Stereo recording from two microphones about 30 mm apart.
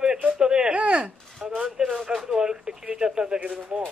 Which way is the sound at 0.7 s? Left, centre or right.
Right.